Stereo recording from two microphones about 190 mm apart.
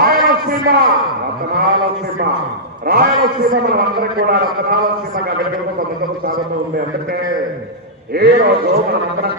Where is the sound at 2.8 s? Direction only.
55° right (ahead or behind).